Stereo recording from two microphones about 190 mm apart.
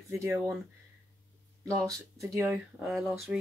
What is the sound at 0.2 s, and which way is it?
Speech, 15° right (ahead or behind).